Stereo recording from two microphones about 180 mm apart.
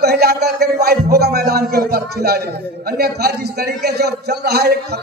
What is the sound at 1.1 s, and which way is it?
A man's voice, 60° right (ahead or behind).